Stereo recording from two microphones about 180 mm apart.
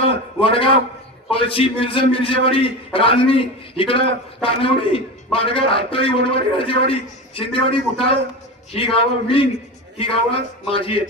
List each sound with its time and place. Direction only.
0.3 s a man's voice: 30° left (ahead or behind)